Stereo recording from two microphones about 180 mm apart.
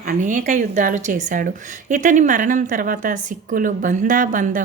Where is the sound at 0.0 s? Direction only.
50° right (ahead or behind).